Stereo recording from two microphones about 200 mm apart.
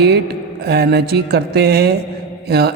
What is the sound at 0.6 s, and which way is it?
A man's voice, 55° right (ahead or behind).